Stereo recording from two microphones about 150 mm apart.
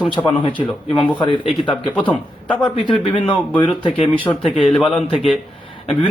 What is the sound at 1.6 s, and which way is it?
Speech, 35° left (ahead or behind).